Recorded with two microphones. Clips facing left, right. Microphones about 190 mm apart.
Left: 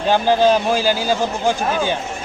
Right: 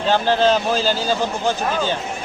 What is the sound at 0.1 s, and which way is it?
Speech, 10° left (ahead or behind).